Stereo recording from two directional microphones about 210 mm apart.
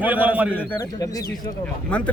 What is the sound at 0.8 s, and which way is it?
Speech, 15° left (ahead or behind).